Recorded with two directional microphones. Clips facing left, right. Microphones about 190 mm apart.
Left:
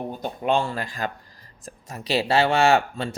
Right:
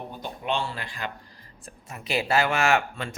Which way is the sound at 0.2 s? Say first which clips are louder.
Left 6 dB; 45° left (ahead or behind).